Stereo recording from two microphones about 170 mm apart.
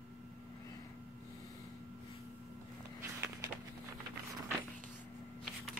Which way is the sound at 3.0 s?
15° right (ahead or behind).